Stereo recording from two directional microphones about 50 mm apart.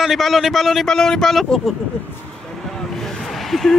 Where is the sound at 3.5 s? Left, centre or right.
Centre.